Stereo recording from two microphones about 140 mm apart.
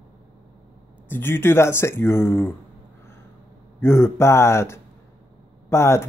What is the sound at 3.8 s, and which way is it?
Speech, 20° left (ahead or behind).